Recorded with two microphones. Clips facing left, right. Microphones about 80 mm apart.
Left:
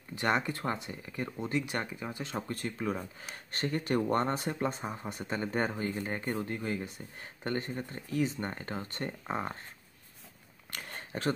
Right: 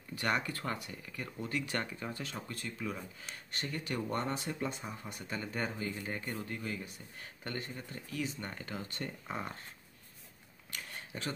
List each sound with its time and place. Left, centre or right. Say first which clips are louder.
0.2 s speech: left 4 dB; left
2.2 s speech: left 6 dB; left
10.7 s a sound: left 4 dB; left